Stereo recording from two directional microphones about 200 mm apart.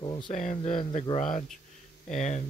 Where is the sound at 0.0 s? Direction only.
25° left (ahead or behind).